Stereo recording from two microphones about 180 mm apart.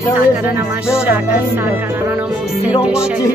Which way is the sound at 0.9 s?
10° right (ahead or behind).